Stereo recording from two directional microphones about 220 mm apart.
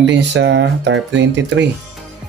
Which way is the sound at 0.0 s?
55° right (ahead or behind).